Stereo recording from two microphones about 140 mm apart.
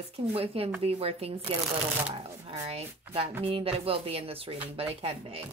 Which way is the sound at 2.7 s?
45° right (ahead or behind).